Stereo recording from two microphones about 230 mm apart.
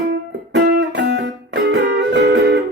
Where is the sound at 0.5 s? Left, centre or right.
Right.